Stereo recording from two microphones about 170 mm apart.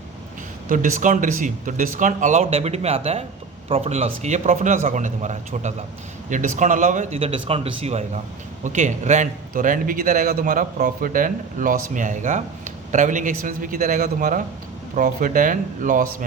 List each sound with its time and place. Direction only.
0.7 s a man's voice: 50° right (ahead or behind)